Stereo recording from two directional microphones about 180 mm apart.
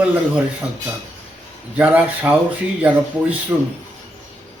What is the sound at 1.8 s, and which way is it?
A man's voice, 10° right (ahead or behind).